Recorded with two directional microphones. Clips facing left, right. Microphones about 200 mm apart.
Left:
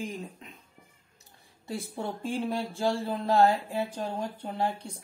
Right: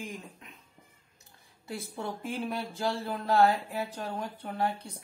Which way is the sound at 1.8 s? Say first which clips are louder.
Left 2 dB; 30° left (ahead or behind).